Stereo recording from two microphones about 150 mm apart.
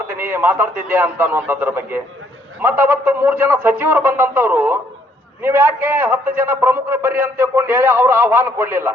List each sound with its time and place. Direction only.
0.1 s a man's voice: 15° right (ahead or behind)